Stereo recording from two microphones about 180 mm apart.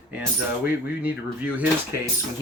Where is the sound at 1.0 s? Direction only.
10° right (ahead or behind).